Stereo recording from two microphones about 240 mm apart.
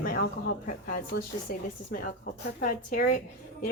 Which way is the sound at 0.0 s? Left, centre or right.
Left.